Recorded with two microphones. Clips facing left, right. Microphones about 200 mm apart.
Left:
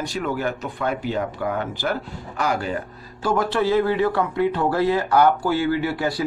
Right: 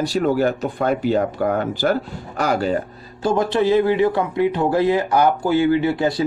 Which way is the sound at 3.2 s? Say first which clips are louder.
Right 3 dB; 20° right (ahead or behind).